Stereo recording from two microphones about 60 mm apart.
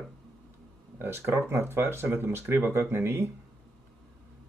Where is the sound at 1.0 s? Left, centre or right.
Right.